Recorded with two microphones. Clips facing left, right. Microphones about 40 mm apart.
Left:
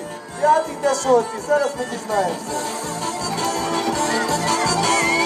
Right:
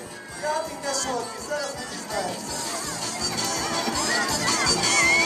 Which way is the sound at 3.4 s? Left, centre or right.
Left.